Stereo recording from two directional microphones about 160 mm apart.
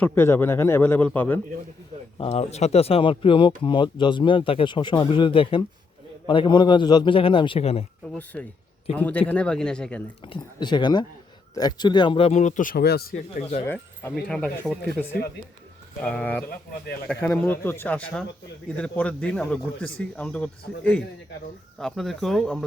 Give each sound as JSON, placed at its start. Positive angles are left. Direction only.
{"t": 0.0, "sound": "a man's voice", "side_deg": 15}
{"t": 2.1, "sound": "speech", "side_deg": 35}
{"t": 8.1, "sound": "a man's voice", "side_deg": 10}
{"t": 10.2, "sound": "speech", "side_deg": 30}
{"t": 14.3, "sound": "speech", "side_deg": 5}
{"t": 16.0, "sound": "a man's voice", "side_deg": 5}